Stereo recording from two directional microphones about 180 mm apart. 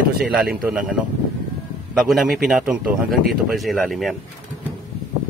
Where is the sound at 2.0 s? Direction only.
Centre (ahead or behind).